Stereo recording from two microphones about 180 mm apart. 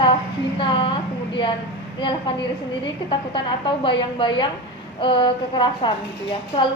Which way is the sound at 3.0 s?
30° left (ahead or behind).